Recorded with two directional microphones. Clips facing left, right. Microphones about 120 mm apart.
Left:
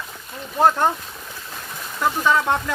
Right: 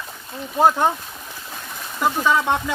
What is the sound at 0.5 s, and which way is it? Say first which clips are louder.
Speech: right 1 dB; 5° right (ahead or behind).